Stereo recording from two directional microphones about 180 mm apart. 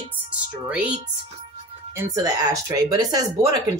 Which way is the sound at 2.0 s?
20° right (ahead or behind).